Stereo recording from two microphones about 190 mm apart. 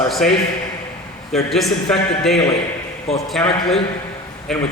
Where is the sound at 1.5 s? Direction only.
Centre (ahead or behind).